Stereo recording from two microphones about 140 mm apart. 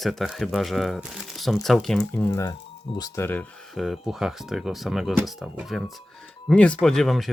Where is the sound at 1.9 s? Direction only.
15° left (ahead or behind).